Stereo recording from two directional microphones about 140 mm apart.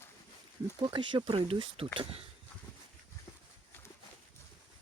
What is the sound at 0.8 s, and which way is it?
Speech, 35° right (ahead or behind).